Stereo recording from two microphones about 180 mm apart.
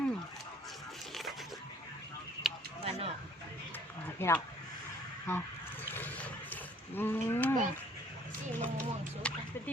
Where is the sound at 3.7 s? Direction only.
10° left (ahead or behind).